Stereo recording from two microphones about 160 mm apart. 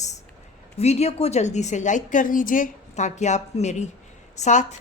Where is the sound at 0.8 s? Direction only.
40° left (ahead or behind).